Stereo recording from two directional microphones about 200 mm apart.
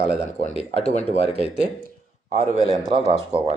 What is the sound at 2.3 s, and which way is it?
A man's voice, 30° right (ahead or behind).